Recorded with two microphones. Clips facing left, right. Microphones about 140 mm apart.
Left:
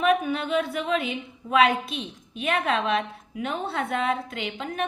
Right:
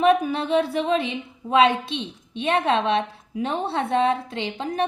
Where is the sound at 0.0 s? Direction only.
35° right (ahead or behind).